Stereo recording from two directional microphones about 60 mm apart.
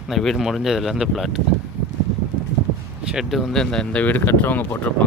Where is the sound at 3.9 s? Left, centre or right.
Left.